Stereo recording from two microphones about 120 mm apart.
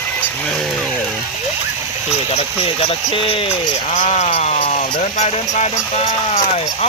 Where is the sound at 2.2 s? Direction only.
55° left (ahead or behind).